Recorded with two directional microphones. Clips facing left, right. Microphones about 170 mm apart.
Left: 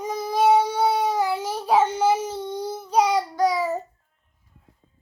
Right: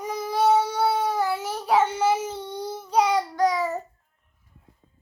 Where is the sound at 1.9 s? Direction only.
10° left (ahead or behind).